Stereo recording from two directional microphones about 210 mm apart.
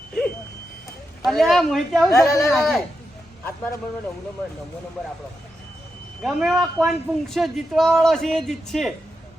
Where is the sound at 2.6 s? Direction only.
Centre (ahead or behind).